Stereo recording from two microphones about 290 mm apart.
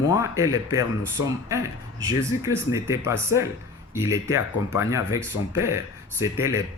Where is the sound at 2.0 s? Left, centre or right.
Centre.